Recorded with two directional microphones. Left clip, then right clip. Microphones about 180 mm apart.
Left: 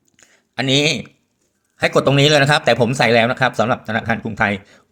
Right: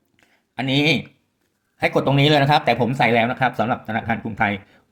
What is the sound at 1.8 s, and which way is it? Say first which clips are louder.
Speech: left 4 dB; 25° left (ahead or behind).